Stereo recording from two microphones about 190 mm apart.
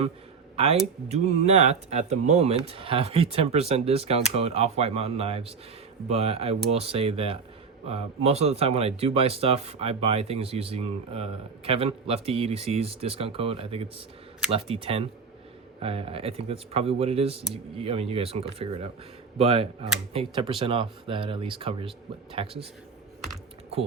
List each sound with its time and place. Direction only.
0.5 s speech: 35° right (ahead or behind)